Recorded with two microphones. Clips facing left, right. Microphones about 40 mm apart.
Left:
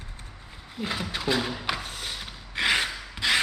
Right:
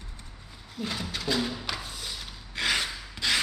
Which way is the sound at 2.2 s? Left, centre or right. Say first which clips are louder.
Left 4 dB; left.